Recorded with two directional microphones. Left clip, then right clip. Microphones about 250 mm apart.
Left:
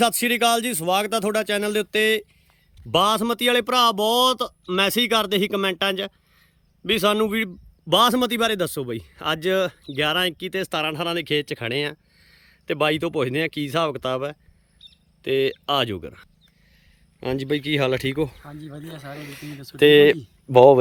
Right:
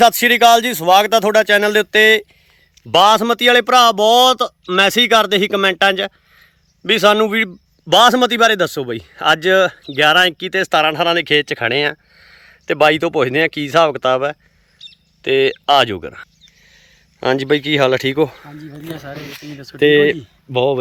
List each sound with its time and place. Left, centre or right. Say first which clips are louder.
0.0 s speech: right 10 dB; centre
20.1 s speech: left 4 dB; left